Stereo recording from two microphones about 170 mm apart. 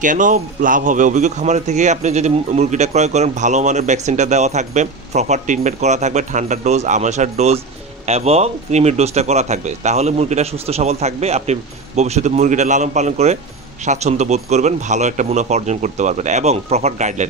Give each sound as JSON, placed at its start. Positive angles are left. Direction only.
{"t": 0.0, "sound": "a man's voice", "side_deg": -50}